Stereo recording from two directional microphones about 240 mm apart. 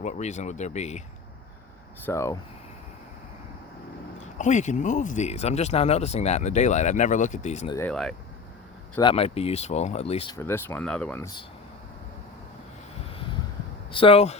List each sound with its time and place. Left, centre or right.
0.0 s speech: left
2.0 s speech: centre
4.4 s speech: left
7.8 s speech: centre
9.0 s speech: left
10.3 s speech: centre
13.9 s speech: left